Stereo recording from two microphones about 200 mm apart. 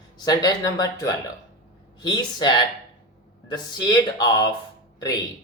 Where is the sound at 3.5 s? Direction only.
20° left (ahead or behind).